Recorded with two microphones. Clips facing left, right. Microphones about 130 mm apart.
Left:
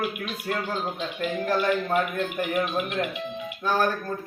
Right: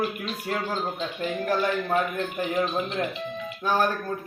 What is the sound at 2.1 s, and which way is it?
A man's voice, 20° right (ahead or behind).